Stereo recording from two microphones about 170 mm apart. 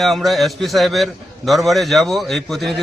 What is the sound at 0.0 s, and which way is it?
A man's voice, centre (ahead or behind).